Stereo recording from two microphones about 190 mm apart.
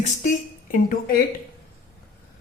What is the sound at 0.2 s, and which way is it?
A woman's voice, 45° left (ahead or behind).